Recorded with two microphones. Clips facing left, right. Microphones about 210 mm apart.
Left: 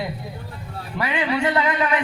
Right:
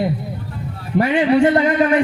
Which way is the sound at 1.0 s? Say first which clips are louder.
Right 8 dB; 45° right (ahead or behind).